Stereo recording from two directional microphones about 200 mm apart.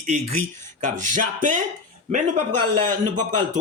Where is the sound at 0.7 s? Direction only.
35° right (ahead or behind).